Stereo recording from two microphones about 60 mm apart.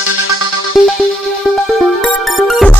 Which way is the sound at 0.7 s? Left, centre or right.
Centre.